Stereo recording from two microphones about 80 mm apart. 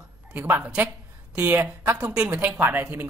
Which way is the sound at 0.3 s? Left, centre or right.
Right.